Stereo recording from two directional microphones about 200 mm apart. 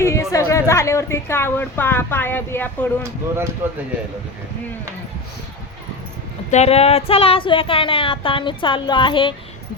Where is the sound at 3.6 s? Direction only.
10° right (ahead or behind).